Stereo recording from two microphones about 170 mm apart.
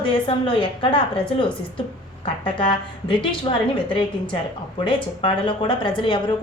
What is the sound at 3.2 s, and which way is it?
A woman's voice, 30° left (ahead or behind).